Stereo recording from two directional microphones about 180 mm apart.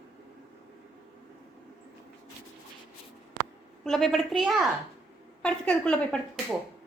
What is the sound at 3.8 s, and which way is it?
A woman's voice, centre (ahead or behind).